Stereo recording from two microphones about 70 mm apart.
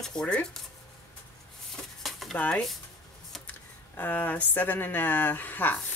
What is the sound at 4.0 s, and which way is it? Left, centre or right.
Speech, left.